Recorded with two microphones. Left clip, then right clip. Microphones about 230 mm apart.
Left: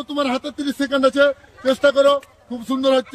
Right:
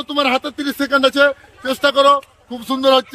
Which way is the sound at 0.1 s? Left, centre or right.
Centre.